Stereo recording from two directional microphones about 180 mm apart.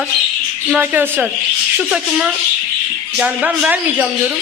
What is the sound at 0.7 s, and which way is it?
Speech, 10° right (ahead or behind).